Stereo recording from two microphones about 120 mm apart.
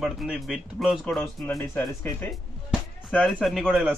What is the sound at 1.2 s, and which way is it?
Speech, 20° left (ahead or behind).